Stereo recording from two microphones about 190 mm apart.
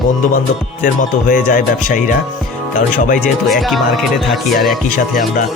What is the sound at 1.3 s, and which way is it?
Speech, 45° left (ahead or behind).